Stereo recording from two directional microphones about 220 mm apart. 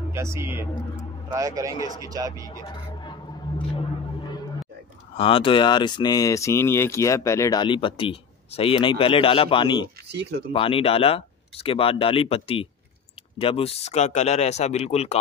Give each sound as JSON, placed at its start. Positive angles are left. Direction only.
{"t": 0.1, "sound": "speech", "side_deg": -10}
{"t": 2.4, "sound": "a sound", "side_deg": 20}
{"t": 5.1, "sound": "speech", "side_deg": 25}
{"t": 10.0, "sound": "speech", "side_deg": -50}
{"t": 10.5, "sound": "speech", "side_deg": 25}